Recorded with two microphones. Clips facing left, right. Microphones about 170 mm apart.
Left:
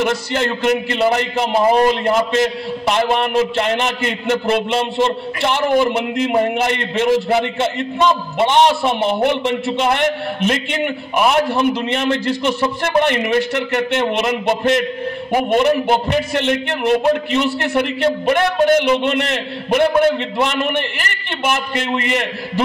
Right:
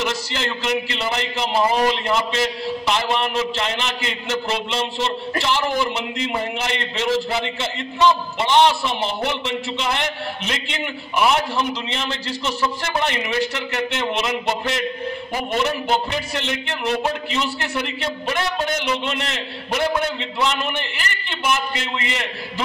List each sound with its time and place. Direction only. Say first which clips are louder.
0.0 s a man's voice: left 6 dB; 55° left (ahead or behind)